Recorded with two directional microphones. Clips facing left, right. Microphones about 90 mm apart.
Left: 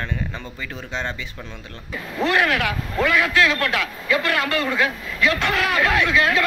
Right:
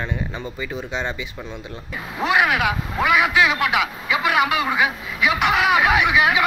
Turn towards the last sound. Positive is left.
turn(degrees=-15)  # may be behind; listen again after turning